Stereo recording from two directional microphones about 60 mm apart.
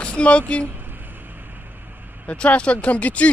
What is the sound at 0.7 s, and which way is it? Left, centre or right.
Vehicle, right.